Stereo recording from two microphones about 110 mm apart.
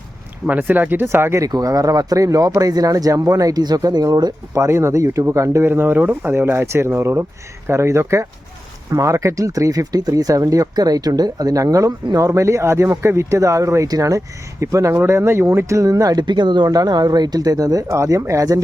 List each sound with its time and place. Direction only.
0.4 s speech: 15° right (ahead or behind)
1.5 s speech: 35° right (ahead or behind)